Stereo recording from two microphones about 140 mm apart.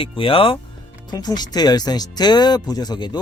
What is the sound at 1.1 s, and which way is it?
Speech, 30° left (ahead or behind).